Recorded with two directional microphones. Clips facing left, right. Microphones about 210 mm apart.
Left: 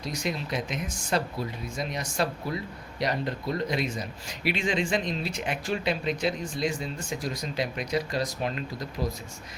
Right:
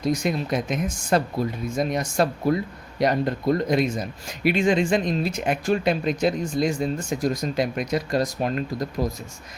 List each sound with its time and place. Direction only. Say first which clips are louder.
0.0 s speech: right 8 dB; 50° right (ahead or behind)